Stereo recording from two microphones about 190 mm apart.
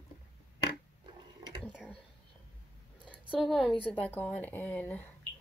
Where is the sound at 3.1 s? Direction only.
25° left (ahead or behind).